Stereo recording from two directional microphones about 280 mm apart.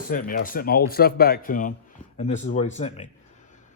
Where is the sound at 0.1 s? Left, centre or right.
Left.